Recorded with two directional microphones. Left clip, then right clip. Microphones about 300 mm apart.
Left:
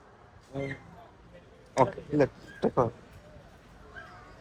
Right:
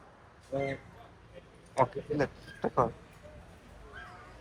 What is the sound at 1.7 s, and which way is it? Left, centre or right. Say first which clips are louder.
A man's voice: left 3 dB; centre.